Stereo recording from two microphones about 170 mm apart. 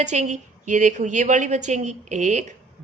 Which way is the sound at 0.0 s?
45° right (ahead or behind).